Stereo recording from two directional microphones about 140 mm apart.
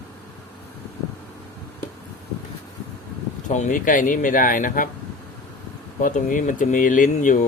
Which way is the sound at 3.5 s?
65° left (ahead or behind).